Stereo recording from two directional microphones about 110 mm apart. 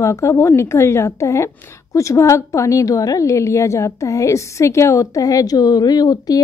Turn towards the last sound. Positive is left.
turn(degrees=35)  # may be behind; listen again after turning